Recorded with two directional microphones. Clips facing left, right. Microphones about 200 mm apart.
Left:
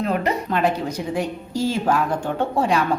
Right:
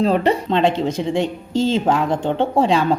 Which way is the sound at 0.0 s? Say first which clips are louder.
Right 6 dB; 30° right (ahead or behind).